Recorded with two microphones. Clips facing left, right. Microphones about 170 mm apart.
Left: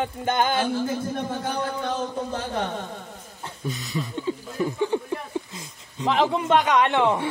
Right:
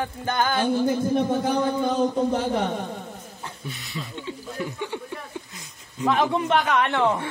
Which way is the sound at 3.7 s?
40° left (ahead or behind).